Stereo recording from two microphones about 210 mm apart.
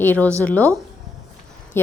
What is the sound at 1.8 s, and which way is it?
Speech, 10° left (ahead or behind).